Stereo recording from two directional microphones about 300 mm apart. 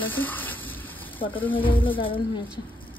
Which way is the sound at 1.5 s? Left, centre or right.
Centre.